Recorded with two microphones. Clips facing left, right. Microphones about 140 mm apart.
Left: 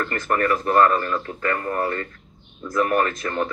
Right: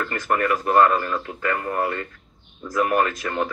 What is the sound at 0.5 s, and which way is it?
Speech, 20° right (ahead or behind).